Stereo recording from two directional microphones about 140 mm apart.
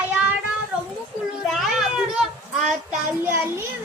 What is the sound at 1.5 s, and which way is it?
Child singing, centre (ahead or behind).